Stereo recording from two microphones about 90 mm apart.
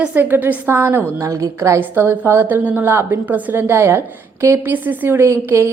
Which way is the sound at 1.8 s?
20° right (ahead or behind).